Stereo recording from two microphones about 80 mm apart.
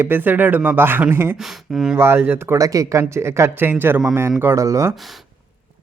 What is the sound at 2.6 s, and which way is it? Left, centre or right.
Speech, right.